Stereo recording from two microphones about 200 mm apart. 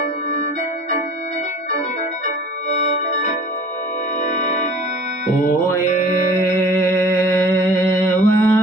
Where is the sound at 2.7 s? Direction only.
35° left (ahead or behind).